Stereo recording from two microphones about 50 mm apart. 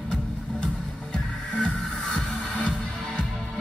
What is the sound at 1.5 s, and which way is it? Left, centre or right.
Music, centre.